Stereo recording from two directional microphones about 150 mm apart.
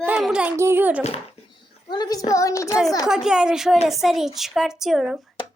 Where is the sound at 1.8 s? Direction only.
30° left (ahead or behind).